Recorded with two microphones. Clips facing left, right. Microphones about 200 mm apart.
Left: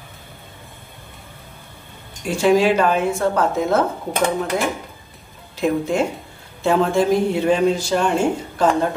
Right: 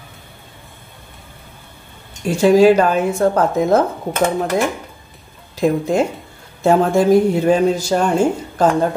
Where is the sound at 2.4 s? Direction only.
40° right (ahead or behind).